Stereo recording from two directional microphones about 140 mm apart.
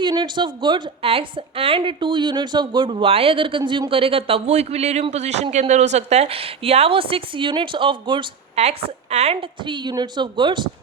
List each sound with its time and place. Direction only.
0.0 s a woman's voice: 35° right (ahead or behind)
8.5 s a woman's voice: 50° right (ahead or behind)
9.6 s a woman's voice: 35° right (ahead or behind)